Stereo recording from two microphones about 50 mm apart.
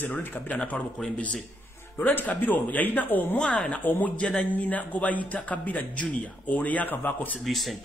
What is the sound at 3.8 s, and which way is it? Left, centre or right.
A man's voice, left.